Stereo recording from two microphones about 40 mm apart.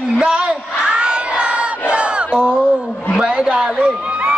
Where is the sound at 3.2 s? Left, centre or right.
Right.